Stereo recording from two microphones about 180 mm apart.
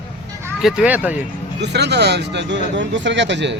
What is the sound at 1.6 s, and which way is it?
Speech, 70° right (ahead or behind).